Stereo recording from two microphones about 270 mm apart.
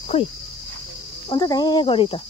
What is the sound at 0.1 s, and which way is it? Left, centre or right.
Speech, left.